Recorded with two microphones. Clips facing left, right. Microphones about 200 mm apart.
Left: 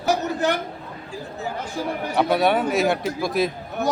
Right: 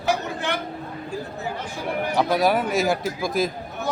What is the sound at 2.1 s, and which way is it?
A man's voice, centre (ahead or behind).